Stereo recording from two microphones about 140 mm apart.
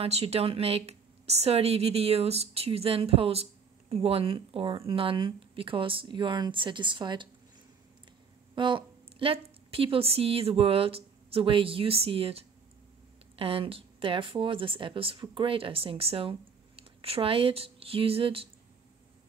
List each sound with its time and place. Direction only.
0.0 s speech: 45° right (ahead or behind)
8.5 s a woman's voice: 40° right (ahead or behind)